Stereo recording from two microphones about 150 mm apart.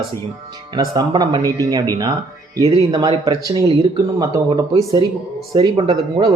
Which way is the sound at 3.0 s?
30° right (ahead or behind).